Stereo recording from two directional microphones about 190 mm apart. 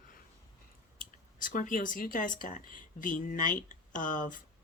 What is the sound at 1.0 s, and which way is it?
Speech, 45° left (ahead or behind).